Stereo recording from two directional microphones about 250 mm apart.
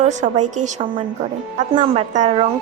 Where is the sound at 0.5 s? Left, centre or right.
Right.